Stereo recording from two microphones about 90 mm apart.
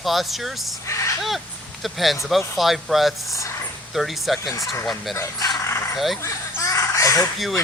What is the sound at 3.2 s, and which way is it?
Speech, 35° left (ahead or behind).